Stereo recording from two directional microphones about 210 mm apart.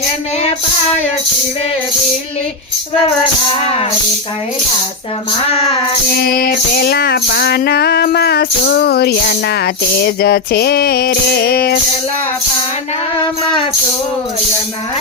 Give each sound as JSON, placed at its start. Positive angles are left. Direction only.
{"t": 6.2, "sound": "music", "side_deg": 45}